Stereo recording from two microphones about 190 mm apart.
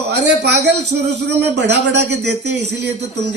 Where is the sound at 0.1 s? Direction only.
60° right (ahead or behind).